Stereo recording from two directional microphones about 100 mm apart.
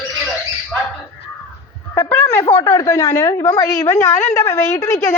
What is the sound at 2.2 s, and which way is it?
A woman's voice, 35° left (ahead or behind).